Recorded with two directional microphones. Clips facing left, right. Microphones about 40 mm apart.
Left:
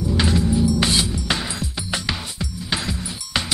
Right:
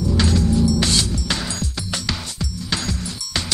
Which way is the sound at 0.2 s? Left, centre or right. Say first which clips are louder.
Even; centre.